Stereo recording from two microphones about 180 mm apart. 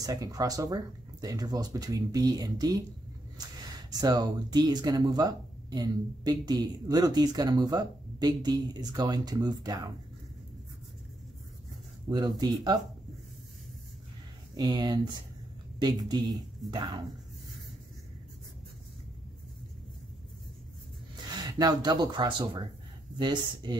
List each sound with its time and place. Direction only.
0.0 s speech: 20° right (ahead or behind)
3.9 s speech: 20° right (ahead or behind)
12.1 s speech: 20° right (ahead or behind)
14.5 s speech: 20° right (ahead or behind)
21.3 s speech: 20° right (ahead or behind)